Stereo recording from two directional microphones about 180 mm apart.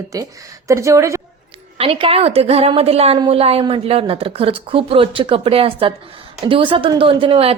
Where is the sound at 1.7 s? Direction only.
30° right (ahead or behind).